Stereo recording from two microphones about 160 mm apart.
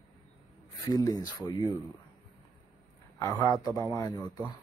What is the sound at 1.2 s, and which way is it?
Speech, 25° left (ahead or behind).